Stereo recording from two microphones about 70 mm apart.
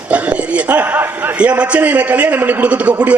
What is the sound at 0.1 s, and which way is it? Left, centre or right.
Speech, centre.